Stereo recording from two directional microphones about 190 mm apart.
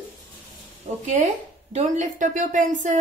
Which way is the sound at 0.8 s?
40° right (ahead or behind).